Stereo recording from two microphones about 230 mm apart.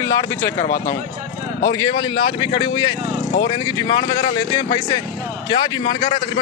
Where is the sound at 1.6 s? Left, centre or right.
Centre.